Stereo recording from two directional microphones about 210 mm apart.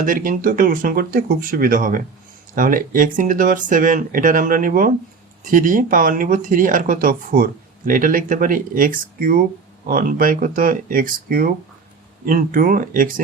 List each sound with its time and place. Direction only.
0.0 s speech: 40° right (ahead or behind)